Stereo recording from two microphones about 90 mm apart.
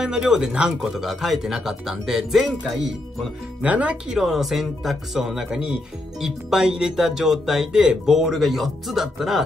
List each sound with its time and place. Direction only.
0.0 s speech: 5° right (ahead or behind)
3.6 s speech: 15° right (ahead or behind)
4.2 s speech: centre (ahead or behind)